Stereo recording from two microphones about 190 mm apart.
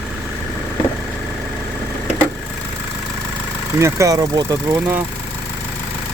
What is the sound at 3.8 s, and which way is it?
Speech, 15° right (ahead or behind).